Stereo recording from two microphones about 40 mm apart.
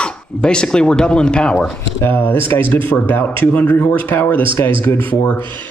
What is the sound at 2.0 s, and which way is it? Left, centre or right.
Speech, left.